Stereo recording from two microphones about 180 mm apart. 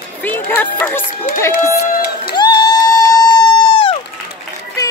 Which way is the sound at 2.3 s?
25° left (ahead or behind).